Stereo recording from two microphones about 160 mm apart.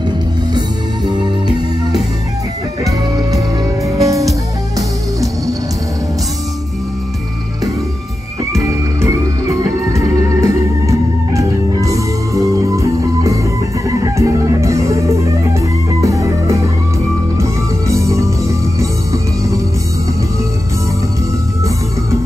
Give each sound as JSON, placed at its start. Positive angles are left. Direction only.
{"t": 0.6, "sound": "music", "side_deg": -25}
{"t": 2.8, "sound": "music", "side_deg": -20}
{"t": 8.5, "sound": "music", "side_deg": -20}